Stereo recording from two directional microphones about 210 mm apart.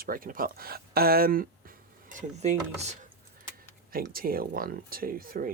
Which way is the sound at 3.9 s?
45° right (ahead or behind).